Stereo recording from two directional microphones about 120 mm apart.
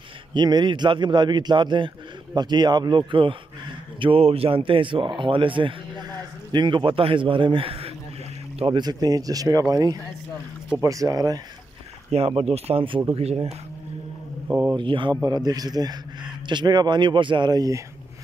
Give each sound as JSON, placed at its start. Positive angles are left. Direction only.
{"t": 0.3, "sound": "a man's voice", "side_deg": -40}
{"t": 12.3, "sound": "speech", "side_deg": -55}
{"t": 14.5, "sound": "speech", "side_deg": -15}
{"t": 14.8, "sound": "speech", "side_deg": -45}
{"t": 15.2, "sound": "a man's voice", "side_deg": -35}